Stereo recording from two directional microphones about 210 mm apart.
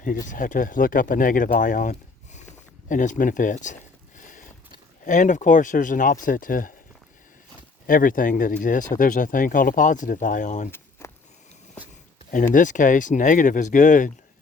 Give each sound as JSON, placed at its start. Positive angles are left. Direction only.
{"t": 0.3, "sound": "speech", "side_deg": 40}
{"t": 7.9, "sound": "speech", "side_deg": 40}
{"t": 12.5, "sound": "speech", "side_deg": 40}